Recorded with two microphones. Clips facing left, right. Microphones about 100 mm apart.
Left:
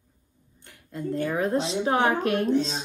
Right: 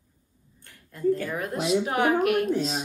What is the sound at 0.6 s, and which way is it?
A woman's voice, 20° left (ahead or behind).